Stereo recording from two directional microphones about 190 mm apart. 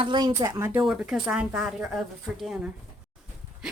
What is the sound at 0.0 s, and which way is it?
Speech, 25° right (ahead or behind).